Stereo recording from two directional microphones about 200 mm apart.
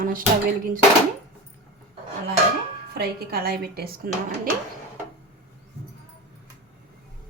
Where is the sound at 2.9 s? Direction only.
50° right (ahead or behind).